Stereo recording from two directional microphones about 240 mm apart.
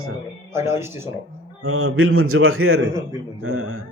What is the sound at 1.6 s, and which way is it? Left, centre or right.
A man's voice, right.